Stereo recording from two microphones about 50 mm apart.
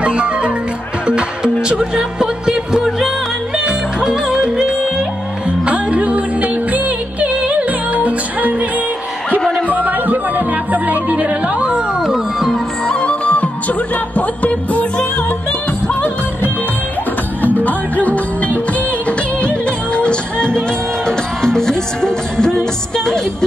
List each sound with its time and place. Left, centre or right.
0.0 s music: right
9.4 s a sound: centre
9.8 s music: right
12.0 s music: centre
12.8 s music: centre
15.9 s music: left; by 23.2 s centre